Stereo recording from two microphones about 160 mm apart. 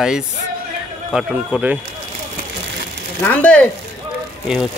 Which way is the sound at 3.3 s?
10° left (ahead or behind).